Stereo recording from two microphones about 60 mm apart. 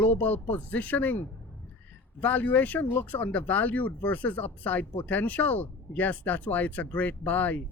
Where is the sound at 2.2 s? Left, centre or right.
Left.